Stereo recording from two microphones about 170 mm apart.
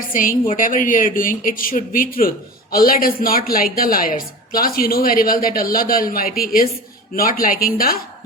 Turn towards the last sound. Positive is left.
turn(degrees=60)  # may be behind; listen again after turning